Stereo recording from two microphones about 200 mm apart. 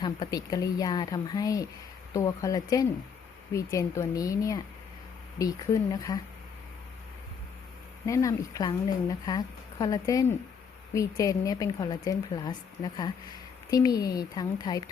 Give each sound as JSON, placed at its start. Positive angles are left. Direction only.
{"t": 0.0, "sound": "a woman's voice", "side_deg": 20}
{"t": 8.0, "sound": "a woman's voice", "side_deg": 15}